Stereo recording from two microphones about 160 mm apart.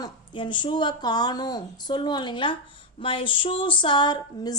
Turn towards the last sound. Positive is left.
turn(degrees=25)  # may be behind; listen again after turning